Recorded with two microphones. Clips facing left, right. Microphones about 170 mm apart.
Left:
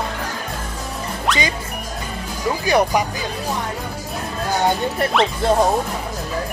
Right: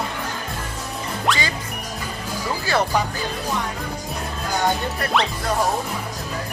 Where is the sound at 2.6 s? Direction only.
15° left (ahead or behind).